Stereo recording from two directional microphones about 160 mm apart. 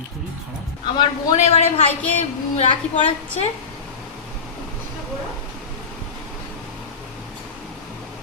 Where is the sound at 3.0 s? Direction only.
40° left (ahead or behind).